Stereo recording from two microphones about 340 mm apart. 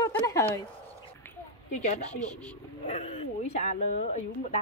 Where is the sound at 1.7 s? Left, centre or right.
Centre.